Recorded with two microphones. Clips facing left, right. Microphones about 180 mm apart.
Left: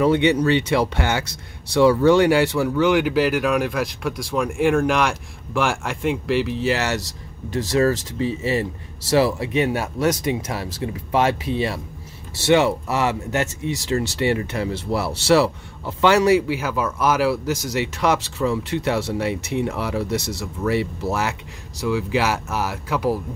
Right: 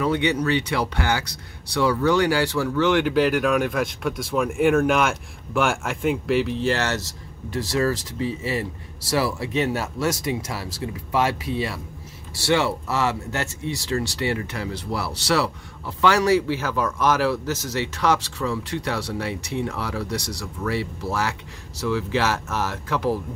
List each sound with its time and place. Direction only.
0.0 s speech: 25° left (ahead or behind); by 23.1 s 10° left (ahead or behind)